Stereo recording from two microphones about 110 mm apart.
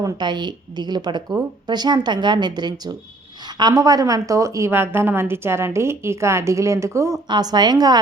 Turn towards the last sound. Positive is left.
turn(degrees=-35)  # may be behind; listen again after turning